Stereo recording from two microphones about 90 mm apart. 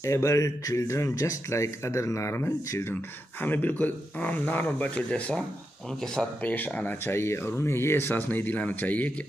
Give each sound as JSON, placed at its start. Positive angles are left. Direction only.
{"t": 0.0, "sound": "speech", "side_deg": 35}
{"t": 6.4, "sound": "speech", "side_deg": 20}